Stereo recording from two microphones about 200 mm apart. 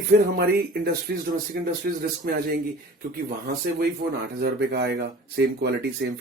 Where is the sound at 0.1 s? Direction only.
55° right (ahead or behind).